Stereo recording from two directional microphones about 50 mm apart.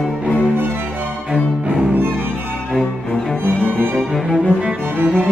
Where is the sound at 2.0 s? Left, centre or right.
Right.